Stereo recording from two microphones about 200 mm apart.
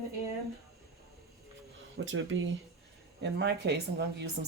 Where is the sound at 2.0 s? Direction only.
70° right (ahead or behind).